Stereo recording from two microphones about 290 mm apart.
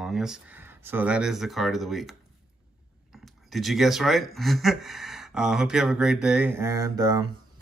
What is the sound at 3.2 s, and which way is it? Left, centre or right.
Speech, centre.